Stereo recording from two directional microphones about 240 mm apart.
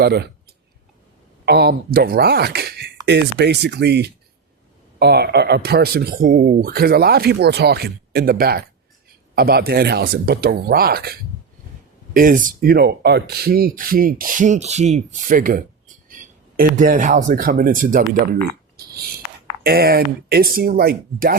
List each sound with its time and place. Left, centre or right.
0.0 s speech: right
1.5 s speech: right
19.6 s speech: right